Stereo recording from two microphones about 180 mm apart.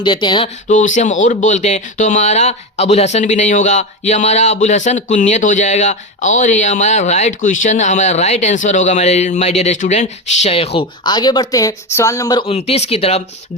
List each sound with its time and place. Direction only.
0.0 s speech: 25° left (ahead or behind)
0.7 s speech: 45° left (ahead or behind); by 12.5 s 20° left (ahead or behind)
12.5 s speech: 35° left (ahead or behind)